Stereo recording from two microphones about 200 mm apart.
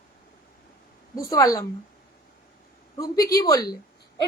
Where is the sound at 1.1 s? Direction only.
15° left (ahead or behind).